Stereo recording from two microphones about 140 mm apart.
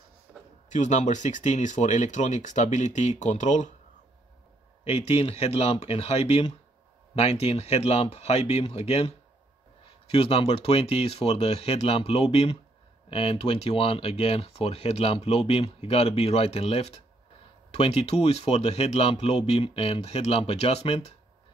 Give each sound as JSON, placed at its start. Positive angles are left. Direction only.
{"t": 0.7, "sound": "speech", "side_deg": 60}
{"t": 4.8, "sound": "speech", "side_deg": 45}